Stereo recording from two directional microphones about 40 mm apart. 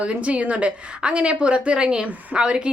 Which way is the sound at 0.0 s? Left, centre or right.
Right.